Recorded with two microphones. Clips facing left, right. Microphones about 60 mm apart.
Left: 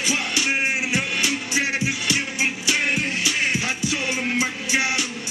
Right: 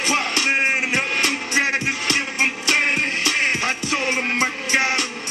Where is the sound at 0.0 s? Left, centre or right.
Right.